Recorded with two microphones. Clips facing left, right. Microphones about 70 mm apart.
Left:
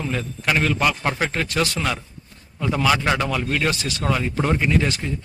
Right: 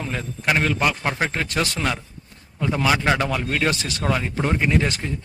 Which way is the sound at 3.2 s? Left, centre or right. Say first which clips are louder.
Even; right.